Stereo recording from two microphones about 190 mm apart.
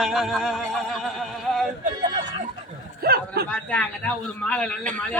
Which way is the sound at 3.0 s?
55° right (ahead or behind).